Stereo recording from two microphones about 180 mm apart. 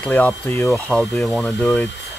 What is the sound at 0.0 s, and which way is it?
Speech, 10° left (ahead or behind).